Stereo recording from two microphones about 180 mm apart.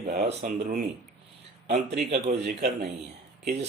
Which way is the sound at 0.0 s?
50° right (ahead or behind).